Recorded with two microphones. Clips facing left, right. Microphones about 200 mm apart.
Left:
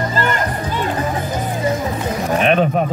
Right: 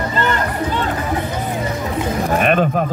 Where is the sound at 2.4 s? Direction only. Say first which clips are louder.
Left 2 dB; centre (ahead or behind).